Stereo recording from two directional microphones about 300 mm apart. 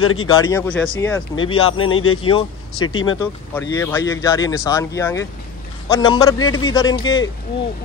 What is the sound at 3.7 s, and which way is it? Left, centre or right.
Speech, centre.